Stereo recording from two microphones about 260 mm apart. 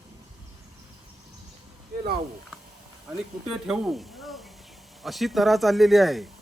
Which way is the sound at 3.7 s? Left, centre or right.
Centre.